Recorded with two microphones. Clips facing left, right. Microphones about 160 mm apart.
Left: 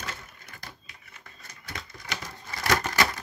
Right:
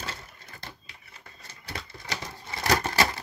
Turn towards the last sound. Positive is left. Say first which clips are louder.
# right 1 dB
turn(degrees=-30)  # may be behind; listen again after turning